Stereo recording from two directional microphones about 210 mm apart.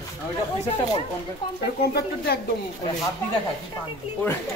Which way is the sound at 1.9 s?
50° left (ahead or behind).